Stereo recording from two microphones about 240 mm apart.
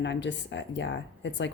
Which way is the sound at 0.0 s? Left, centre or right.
Left.